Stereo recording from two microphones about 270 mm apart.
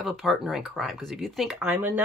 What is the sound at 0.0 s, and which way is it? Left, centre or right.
Speech, centre.